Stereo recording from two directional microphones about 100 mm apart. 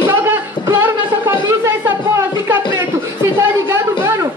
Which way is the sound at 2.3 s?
30° right (ahead or behind).